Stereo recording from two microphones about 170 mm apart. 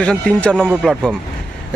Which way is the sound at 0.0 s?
5° left (ahead or behind).